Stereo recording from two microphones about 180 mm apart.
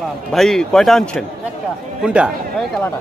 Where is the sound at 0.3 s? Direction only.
Centre (ahead or behind).